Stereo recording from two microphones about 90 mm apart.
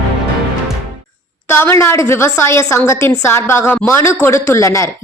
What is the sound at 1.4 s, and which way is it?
A woman's voice, 30° left (ahead or behind).